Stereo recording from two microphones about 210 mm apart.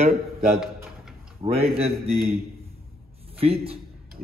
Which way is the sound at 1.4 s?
30° right (ahead or behind).